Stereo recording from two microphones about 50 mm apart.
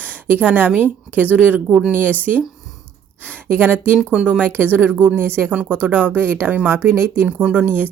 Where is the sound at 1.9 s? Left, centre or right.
Right.